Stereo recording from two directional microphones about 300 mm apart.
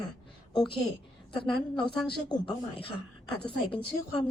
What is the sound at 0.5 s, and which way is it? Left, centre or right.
Speech, centre.